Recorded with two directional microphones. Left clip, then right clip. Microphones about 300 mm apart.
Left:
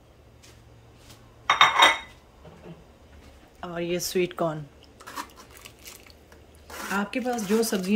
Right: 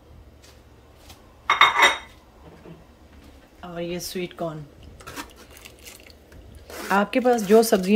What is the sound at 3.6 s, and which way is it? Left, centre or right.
Speech, centre.